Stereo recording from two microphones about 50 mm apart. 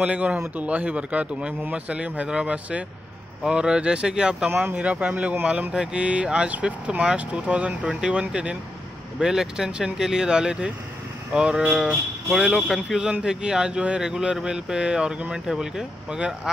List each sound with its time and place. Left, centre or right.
0.0 s speech: right
4.8 s speech: right